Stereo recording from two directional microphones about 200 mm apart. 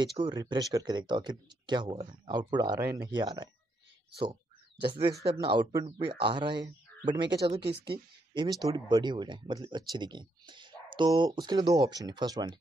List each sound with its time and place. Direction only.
0.0 s speech: 20° right (ahead or behind)
4.2 s a sound: 25° right (ahead or behind)
5.3 s speech: 25° right (ahead or behind)